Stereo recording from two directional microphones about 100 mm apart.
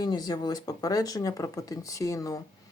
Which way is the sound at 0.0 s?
40° left (ahead or behind).